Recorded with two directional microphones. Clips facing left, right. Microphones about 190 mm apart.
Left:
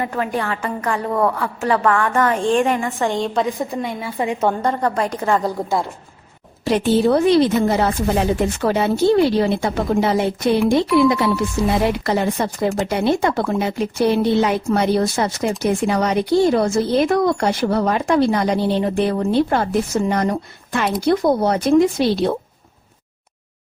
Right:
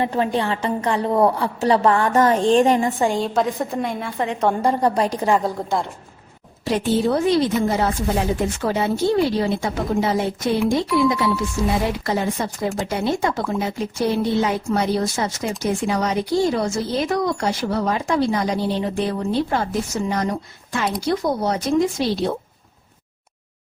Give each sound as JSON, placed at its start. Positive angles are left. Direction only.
{"t": 0.0, "sound": "a woman's voice", "side_deg": -25}
{"t": 3.0, "sound": "a woman's voice", "side_deg": -10}
{"t": 4.2, "sound": "a woman's voice", "side_deg": 10}
{"t": 4.6, "sound": "a woman's voice", "side_deg": -15}
{"t": 5.4, "sound": "a woman's voice", "side_deg": 5}
{"t": 6.7, "sound": "speech", "side_deg": 70}